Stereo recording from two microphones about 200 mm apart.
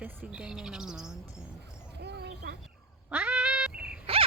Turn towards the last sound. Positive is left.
turn(degrees=-5)  # may be behind; listen again after turning